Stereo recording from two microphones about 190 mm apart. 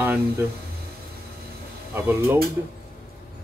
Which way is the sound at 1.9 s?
10° right (ahead or behind).